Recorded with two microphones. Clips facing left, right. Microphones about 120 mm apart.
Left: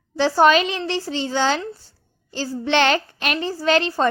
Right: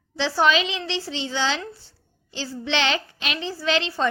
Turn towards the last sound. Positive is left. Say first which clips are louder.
# left 5 dB
turn(degrees=45)  # may be behind; listen again after turning